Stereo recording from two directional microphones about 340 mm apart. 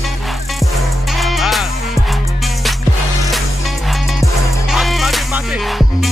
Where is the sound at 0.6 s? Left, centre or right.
Centre.